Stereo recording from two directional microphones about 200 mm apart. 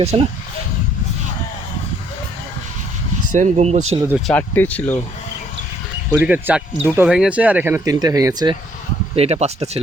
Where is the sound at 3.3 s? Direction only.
35° right (ahead or behind).